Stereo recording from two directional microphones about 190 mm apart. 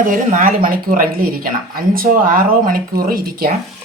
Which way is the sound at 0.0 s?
45° right (ahead or behind).